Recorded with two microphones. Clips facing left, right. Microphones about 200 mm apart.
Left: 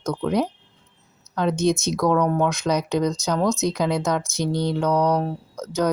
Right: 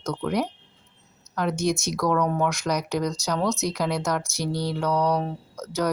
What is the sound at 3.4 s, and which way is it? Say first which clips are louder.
Speech: left 3 dB; centre (ahead or behind).